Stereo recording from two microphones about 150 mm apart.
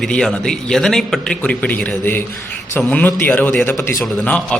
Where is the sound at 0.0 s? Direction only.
5° left (ahead or behind).